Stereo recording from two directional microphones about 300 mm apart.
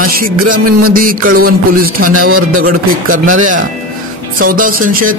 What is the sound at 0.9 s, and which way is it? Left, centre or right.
Speech, right.